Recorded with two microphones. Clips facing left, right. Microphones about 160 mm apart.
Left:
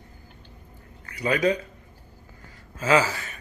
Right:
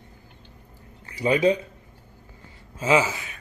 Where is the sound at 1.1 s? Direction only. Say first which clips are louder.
Right 3 dB; 25° right (ahead or behind).